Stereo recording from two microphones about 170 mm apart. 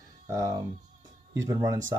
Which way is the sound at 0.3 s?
20° right (ahead or behind).